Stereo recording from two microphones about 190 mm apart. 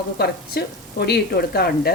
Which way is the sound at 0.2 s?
55° left (ahead or behind).